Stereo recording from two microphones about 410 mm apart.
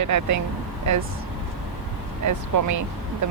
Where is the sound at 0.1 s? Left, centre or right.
Right.